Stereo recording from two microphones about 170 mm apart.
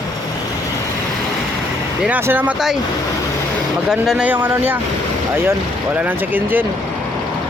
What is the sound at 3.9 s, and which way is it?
Speech, 5° right (ahead or behind).